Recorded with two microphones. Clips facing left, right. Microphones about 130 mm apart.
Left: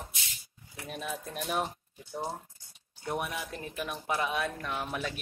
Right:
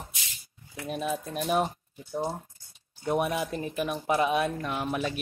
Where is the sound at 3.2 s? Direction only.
25° right (ahead or behind).